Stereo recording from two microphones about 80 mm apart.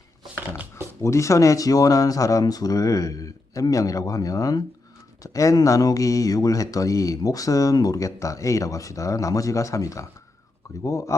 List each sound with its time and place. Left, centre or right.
1.0 s speech: left